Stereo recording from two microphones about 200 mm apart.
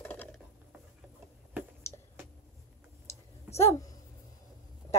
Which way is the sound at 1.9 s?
15° left (ahead or behind).